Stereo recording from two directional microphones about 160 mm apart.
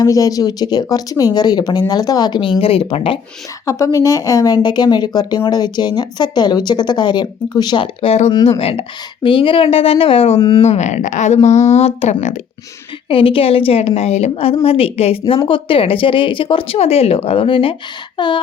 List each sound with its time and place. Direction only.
0.0 s speech: 20° left (ahead or behind)
3.7 s speech: 20° left (ahead or behind)
10.6 s speech: 45° left (ahead or behind); by 18.3 s 30° left (ahead or behind)